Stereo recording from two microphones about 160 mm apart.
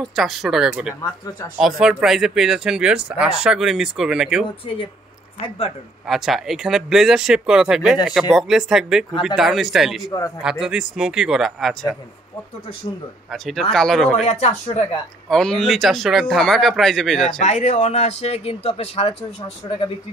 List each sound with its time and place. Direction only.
0.0 s speech: centre (ahead or behind)
6.0 s speech: centre (ahead or behind)
13.3 s speech: centre (ahead or behind)
14.2 s speech: 45° left (ahead or behind)
15.2 s speech: 5° left (ahead or behind)
17.4 s speech: 45° left (ahead or behind)